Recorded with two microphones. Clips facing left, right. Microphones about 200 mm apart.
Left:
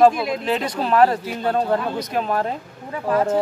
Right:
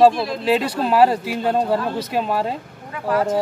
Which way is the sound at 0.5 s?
10° right (ahead or behind).